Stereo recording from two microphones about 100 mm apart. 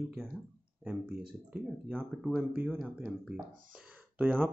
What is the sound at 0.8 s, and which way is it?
Speech, 10° right (ahead or behind).